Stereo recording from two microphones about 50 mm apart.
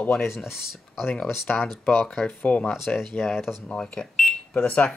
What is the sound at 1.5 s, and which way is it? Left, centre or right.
Speech, left.